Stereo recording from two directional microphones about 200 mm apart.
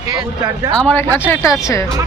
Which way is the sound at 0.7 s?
5° left (ahead or behind).